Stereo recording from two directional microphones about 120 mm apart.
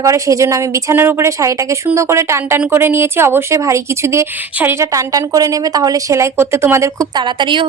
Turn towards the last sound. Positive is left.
turn(degrees=-40)  # may be behind; listen again after turning